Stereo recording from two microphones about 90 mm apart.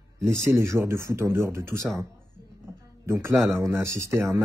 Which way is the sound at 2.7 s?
30° right (ahead or behind).